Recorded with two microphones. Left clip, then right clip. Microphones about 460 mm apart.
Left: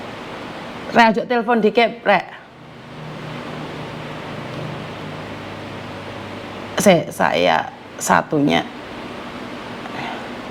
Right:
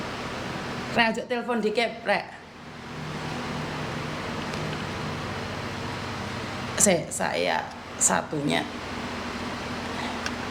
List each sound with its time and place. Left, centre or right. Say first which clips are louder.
0.9 s a woman's voice: left 11 dB; left
6.7 s a woman's voice: left 10 dB; left